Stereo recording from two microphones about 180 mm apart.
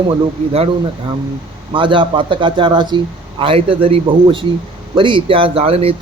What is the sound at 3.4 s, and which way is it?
A man's voice, 30° right (ahead or behind).